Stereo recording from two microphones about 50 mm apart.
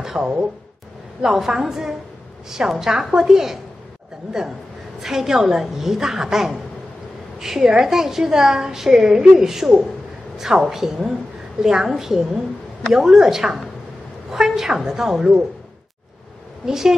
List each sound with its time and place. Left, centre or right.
0.2 s speech: right
1.2 s a woman's voice: centre
16.6 s a woman's voice: centre